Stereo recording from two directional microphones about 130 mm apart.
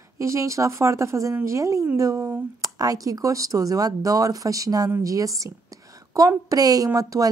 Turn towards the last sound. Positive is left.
turn(degrees=-25)  # may be behind; listen again after turning